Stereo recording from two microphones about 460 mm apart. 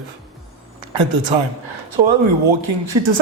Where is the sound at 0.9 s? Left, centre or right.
Right.